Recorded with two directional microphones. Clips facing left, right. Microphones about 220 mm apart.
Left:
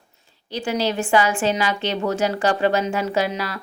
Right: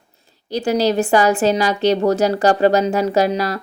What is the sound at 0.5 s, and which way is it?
A woman's voice, 40° right (ahead or behind).